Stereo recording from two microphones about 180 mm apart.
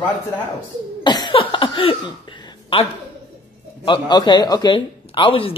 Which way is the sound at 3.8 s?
25° left (ahead or behind).